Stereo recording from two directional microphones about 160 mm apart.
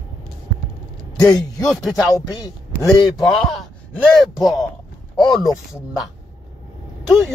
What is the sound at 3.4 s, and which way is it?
A man's voice, 5° left (ahead or behind).